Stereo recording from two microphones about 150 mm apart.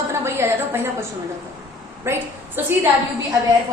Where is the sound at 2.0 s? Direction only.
15° right (ahead or behind).